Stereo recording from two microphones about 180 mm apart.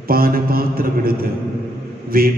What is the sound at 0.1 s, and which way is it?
Mantra, 55° right (ahead or behind).